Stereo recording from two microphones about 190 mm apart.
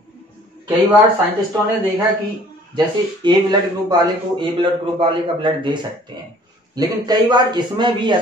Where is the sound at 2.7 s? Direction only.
20° right (ahead or behind).